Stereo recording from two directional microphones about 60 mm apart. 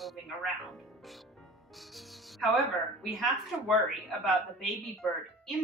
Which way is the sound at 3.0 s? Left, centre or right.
Centre.